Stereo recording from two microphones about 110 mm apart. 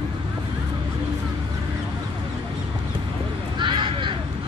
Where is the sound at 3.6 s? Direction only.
50° right (ahead or behind).